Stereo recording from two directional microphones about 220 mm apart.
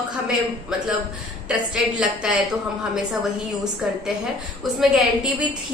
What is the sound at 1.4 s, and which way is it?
Speech, 5° right (ahead or behind).